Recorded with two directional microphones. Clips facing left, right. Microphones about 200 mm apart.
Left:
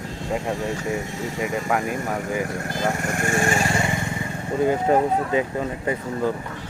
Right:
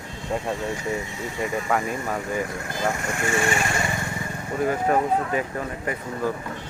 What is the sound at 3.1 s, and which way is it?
Speech, 45° left (ahead or behind).